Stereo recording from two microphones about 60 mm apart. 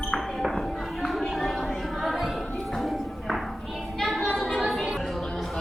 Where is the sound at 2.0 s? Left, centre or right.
Centre.